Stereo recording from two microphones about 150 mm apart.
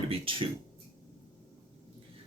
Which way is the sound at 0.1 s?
35° right (ahead or behind).